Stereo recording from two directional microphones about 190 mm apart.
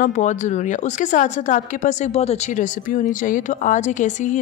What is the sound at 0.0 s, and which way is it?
A woman's voice, 40° left (ahead or behind).